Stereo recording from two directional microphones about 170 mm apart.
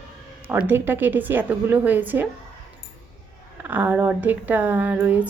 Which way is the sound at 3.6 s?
10° right (ahead or behind).